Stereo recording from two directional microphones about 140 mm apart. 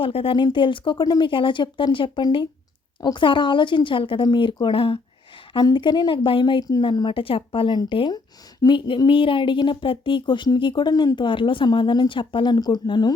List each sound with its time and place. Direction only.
0.0 s a woman's voice: 40° left (ahead or behind)